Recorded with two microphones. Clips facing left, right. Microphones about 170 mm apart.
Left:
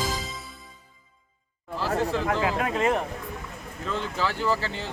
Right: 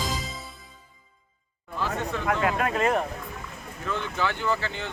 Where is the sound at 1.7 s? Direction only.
35° left (ahead or behind).